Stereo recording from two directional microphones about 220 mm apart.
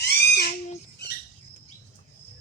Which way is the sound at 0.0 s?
50° left (ahead or behind).